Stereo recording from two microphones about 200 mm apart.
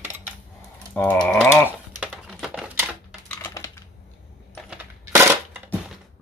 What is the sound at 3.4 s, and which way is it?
Typing, 15° left (ahead or behind).